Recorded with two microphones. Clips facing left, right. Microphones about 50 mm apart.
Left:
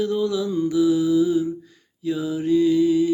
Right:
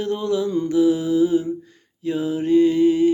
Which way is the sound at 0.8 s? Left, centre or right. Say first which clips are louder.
Right 1 dB; right.